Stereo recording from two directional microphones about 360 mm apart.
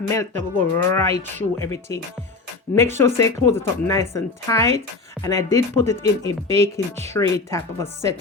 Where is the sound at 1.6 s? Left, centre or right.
Centre.